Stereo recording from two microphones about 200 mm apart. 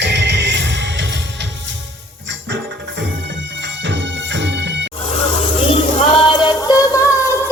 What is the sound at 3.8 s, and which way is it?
Music, 65° right (ahead or behind).